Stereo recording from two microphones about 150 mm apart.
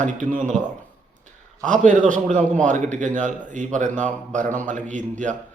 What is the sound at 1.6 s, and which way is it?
A man's voice, 55° right (ahead or behind).